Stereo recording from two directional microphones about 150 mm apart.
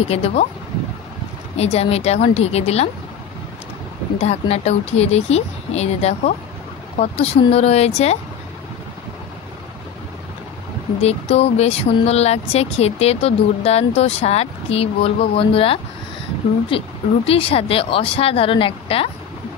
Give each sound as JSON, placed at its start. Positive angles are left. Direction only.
{"t": 0.1, "sound": "speech", "side_deg": 45}
{"t": 1.6, "sound": "speech", "side_deg": 45}
{"t": 4.2, "sound": "speech", "side_deg": 45}
{"t": 11.0, "sound": "speech", "side_deg": 45}